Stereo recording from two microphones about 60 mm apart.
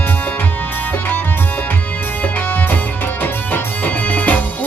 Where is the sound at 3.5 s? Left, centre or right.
Left.